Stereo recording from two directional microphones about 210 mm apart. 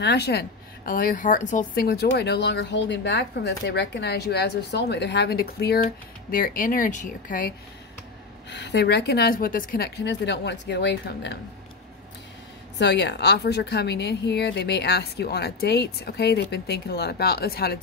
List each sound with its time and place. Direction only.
0.0 s a woman's voice: 50° left (ahead or behind)
8.5 s a woman's voice: 55° left (ahead or behind)
12.7 s a woman's voice: 55° left (ahead or behind)